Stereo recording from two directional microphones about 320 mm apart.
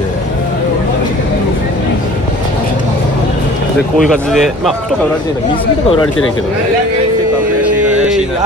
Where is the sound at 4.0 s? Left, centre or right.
Centre.